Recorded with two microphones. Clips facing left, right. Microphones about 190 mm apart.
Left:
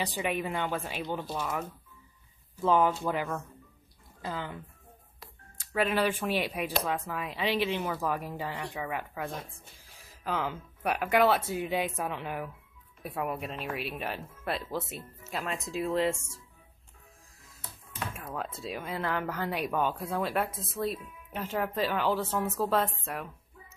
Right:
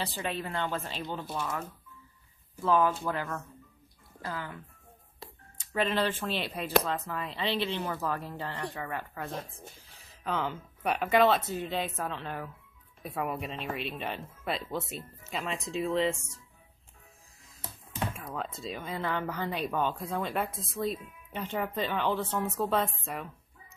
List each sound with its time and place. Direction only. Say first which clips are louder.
0.0 s speech: left 3 dB; 15° left (ahead or behind)
1.2 s speech: left 1 dB; centre (ahead or behind)
2.6 s speech: left 1 dB; 20° left (ahead or behind)
5.8 s speech: left 1 dB; 10° left (ahead or behind)
18.1 s speech: even; 5° left (ahead or behind)